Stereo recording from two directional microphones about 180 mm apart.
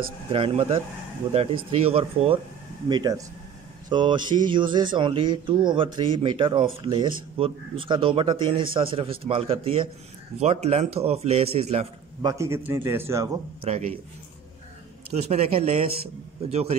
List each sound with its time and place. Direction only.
0.0 s speech: 30° right (ahead or behind)
2.9 s speech: 20° right (ahead or behind)
12.2 s a man's voice: 20° right (ahead or behind)
13.7 s speech: 35° right (ahead or behind)
15.0 s speech: 35° right (ahead or behind)